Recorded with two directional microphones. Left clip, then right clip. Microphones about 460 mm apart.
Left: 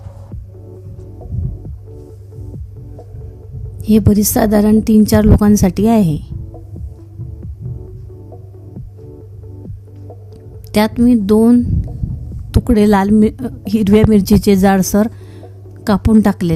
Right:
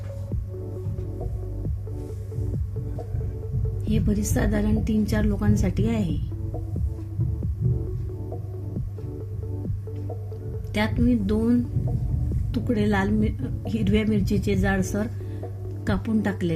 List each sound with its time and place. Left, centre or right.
3.8 s a woman's voice: left
10.7 s a woman's voice: left